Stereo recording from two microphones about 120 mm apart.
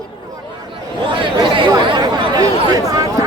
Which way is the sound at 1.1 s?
40° right (ahead or behind).